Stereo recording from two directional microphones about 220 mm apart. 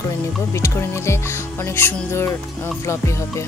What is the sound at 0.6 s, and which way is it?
Speech, 10° left (ahead or behind).